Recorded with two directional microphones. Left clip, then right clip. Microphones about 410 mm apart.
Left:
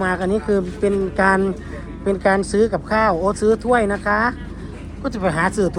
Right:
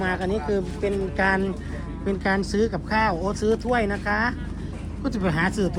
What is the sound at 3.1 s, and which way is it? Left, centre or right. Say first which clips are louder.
Speech: left 7 dB; left.